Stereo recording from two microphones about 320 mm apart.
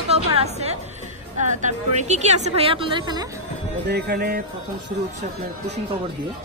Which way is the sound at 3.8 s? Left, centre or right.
Right.